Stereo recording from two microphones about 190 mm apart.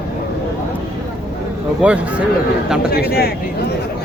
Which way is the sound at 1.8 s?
5° right (ahead or behind).